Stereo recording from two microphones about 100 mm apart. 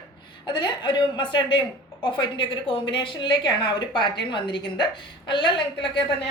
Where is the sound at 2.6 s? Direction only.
60° left (ahead or behind).